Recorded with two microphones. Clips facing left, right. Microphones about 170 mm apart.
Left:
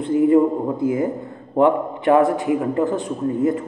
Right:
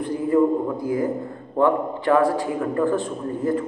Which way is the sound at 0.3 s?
25° left (ahead or behind).